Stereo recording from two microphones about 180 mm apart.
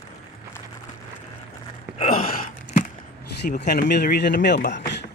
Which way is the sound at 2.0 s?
40° left (ahead or behind).